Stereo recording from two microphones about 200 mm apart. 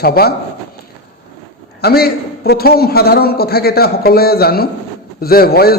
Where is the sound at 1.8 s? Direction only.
50° left (ahead or behind).